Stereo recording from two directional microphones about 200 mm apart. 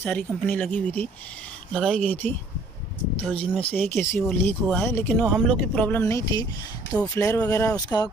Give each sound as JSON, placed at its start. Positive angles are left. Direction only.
{"t": 0.0, "sound": "speech", "side_deg": 5}